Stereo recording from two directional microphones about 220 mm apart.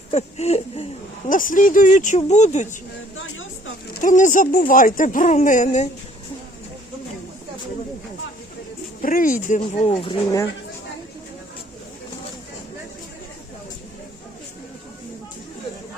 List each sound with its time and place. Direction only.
0.1 s speech: 30° left (ahead or behind)
4.0 s speech: 35° left (ahead or behind)
9.0 s speech: 40° left (ahead or behind); by 10.4 s 25° left (ahead or behind)